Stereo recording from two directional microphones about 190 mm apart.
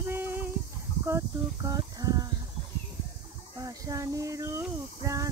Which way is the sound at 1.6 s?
20° right (ahead or behind).